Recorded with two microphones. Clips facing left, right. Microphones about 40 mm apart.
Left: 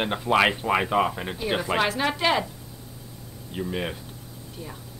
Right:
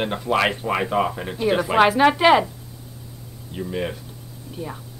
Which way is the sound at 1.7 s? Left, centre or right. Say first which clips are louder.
Right 10 dB; centre.